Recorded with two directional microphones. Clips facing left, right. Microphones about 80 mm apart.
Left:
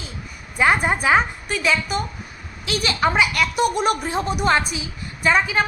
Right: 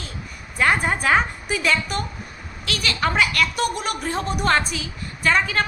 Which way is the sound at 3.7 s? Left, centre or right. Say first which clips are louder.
Left 7 dB; left.